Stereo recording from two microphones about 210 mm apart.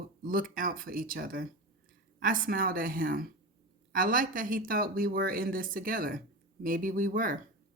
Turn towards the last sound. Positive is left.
turn(degrees=-40)  # may be behind; listen again after turning